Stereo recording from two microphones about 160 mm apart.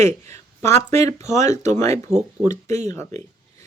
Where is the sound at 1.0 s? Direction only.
20° left (ahead or behind).